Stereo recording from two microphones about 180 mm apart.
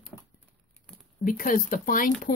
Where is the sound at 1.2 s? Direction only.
50° left (ahead or behind).